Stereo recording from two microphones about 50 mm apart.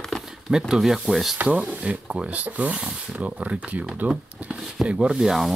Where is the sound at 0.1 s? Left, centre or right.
Centre.